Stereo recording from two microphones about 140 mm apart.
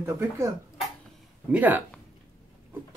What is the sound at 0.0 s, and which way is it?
Speech, 20° right (ahead or behind).